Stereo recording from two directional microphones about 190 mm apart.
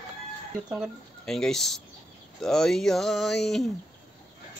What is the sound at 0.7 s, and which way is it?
Speech, centre (ahead or behind).